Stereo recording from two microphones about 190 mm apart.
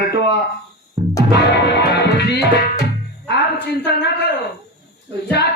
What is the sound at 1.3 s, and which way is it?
Music, 60° left (ahead or behind).